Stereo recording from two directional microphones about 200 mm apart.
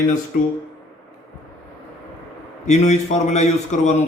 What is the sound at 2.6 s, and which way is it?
A man's voice, 35° left (ahead or behind).